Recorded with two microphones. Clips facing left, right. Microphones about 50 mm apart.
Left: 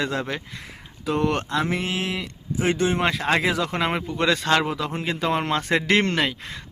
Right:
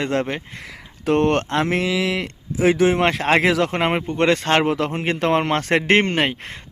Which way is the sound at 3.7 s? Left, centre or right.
Right.